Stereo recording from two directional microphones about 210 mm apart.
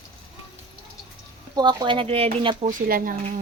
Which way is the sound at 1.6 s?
20° right (ahead or behind).